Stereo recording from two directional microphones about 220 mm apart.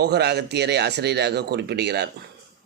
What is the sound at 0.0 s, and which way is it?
Speech, 50° right (ahead or behind).